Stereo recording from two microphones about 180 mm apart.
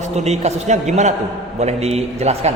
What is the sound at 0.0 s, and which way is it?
A man's voice, 40° right (ahead or behind).